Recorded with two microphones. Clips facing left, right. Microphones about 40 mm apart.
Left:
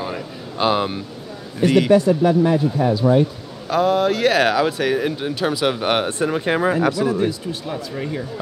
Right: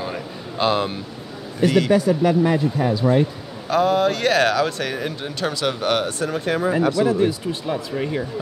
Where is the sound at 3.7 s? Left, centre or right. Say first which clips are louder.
Left 1 dB; centre; by 6.7 s left.